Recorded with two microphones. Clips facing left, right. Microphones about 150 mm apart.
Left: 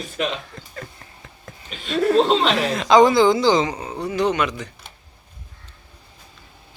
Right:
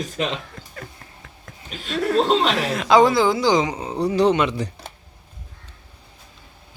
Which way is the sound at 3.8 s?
30° right (ahead or behind).